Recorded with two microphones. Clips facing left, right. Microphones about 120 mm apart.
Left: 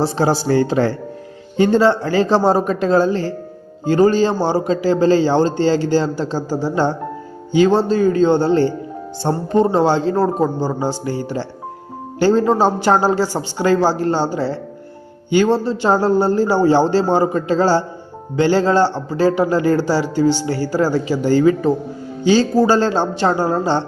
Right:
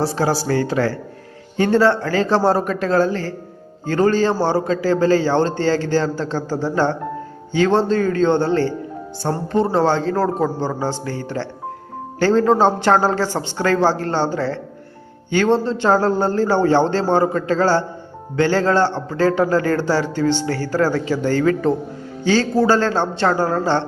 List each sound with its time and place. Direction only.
0.0 s a man's voice: 25° left (ahead or behind)